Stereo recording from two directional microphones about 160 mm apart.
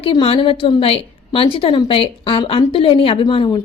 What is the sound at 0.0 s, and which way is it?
A woman's voice, 35° left (ahead or behind).